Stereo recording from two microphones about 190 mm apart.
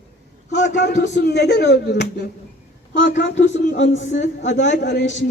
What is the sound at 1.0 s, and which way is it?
A man's voice, 65° left (ahead or behind).